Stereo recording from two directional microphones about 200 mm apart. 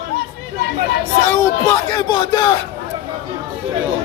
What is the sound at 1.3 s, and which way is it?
Speech, 15° left (ahead or behind).